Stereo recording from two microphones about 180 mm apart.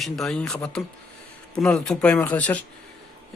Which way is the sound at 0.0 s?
Centre (ahead or behind).